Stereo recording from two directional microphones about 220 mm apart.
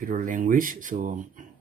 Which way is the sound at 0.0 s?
40° right (ahead or behind).